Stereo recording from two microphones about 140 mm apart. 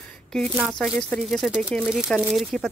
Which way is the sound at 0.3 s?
5° left (ahead or behind).